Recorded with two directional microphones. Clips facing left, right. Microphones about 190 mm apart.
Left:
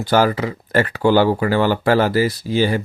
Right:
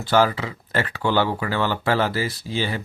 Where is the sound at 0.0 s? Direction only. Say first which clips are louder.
Left 3 dB; 45° left (ahead or behind).